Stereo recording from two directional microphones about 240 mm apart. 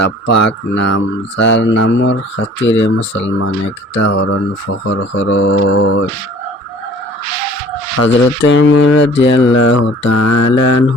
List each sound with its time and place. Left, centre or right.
0.3 s mantra: left
8.0 s mantra: left
10.1 s mantra: left